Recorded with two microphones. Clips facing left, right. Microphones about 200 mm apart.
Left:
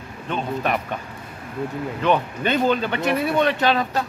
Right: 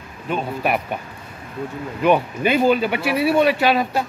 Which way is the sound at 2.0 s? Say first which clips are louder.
Right 4 dB; 10° right (ahead or behind).